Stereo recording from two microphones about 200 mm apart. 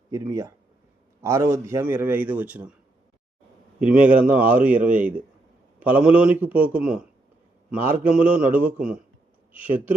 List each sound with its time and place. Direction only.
0.1 s a man's voice: 15° right (ahead or behind)
3.8 s a man's voice: 5° right (ahead or behind)
8.1 s a man's voice: 5° right (ahead or behind)